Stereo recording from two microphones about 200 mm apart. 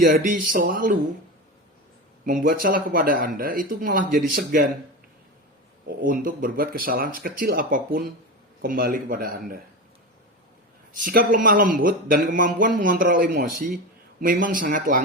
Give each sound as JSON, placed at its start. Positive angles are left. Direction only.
{"t": 0.0, "sound": "speech", "side_deg": -45}
{"t": 2.2, "sound": "speech", "side_deg": -45}
{"t": 6.0, "sound": "speech", "side_deg": -45}
{"t": 10.9, "sound": "speech", "side_deg": -45}